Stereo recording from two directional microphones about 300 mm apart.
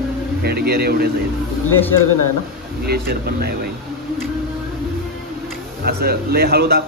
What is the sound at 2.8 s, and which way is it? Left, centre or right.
Speech, right.